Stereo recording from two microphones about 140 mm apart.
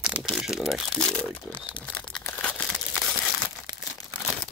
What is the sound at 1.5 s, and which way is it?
Speech, 35° left (ahead or behind).